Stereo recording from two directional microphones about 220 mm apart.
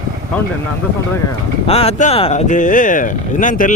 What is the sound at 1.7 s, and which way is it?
Speech, 25° left (ahead or behind).